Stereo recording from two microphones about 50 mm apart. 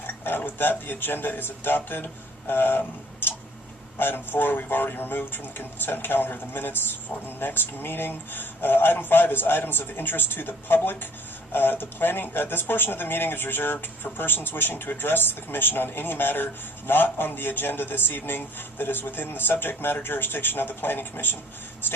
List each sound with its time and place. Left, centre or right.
0.0 s speech: left
2.5 s a sound: left
3.9 s speech: left